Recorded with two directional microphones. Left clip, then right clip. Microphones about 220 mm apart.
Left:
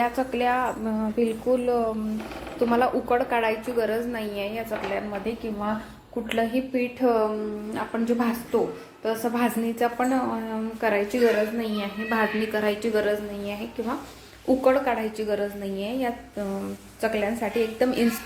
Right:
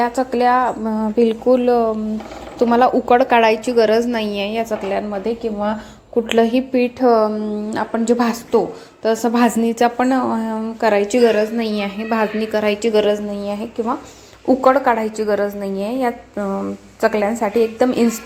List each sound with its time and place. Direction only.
0.0 s a woman's voice: 25° right (ahead or behind)
7.7 s a woman's voice: 40° right (ahead or behind)
12.0 s a woman's voice: 25° right (ahead or behind)